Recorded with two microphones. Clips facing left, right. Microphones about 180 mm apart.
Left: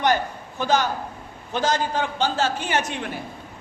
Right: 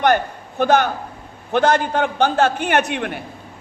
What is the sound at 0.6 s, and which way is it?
A man's voice, 60° right (ahead or behind).